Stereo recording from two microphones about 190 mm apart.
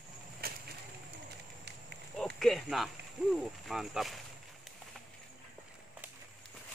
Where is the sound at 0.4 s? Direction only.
55° right (ahead or behind).